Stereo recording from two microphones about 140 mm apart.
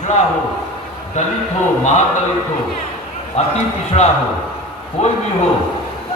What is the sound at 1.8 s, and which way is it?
Speech, 55° left (ahead or behind).